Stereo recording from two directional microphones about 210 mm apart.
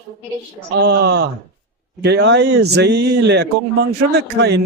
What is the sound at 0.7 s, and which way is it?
Speech, 50° right (ahead or behind).